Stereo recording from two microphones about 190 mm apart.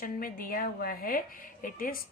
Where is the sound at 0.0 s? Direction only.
50° left (ahead or behind).